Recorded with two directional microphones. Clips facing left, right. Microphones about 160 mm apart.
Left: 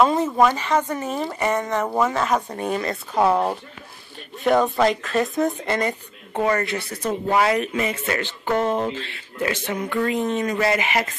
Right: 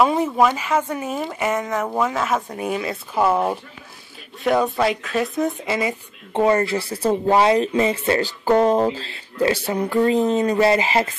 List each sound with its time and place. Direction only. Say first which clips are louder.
0.0 s speech: even; 5° right (ahead or behind)
4.4 s speech: left 1 dB; centre (ahead or behind)
6.3 s a woman's voice: right 4 dB; 25° right (ahead or behind)